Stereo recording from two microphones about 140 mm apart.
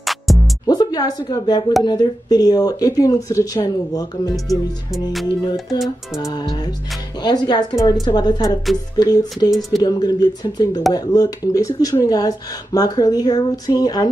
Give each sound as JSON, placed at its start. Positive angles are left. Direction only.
{"t": 0.0, "sound": "music", "side_deg": 0}
{"t": 0.7, "sound": "speech", "side_deg": 25}
{"t": 6.2, "sound": "speech", "side_deg": 30}
{"t": 9.5, "sound": "speech", "side_deg": 0}
{"t": 9.8, "sound": "speech", "side_deg": 25}